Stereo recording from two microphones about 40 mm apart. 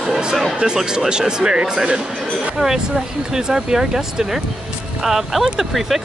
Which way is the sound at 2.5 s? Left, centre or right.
Centre.